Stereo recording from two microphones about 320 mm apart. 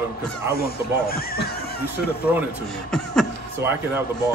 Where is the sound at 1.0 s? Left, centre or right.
Left.